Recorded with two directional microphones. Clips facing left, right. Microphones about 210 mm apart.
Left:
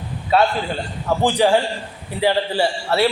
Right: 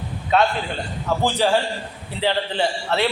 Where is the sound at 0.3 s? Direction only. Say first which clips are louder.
Left 2 dB; 5° left (ahead or behind).